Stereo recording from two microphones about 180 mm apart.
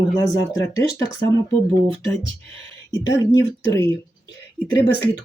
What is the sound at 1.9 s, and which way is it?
Speech, 30° right (ahead or behind).